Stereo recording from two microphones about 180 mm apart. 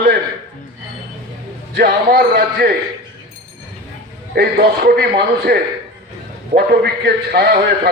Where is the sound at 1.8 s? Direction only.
60° right (ahead or behind).